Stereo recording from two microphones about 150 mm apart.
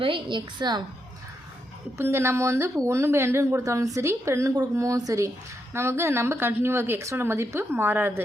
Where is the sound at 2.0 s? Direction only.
15° right (ahead or behind).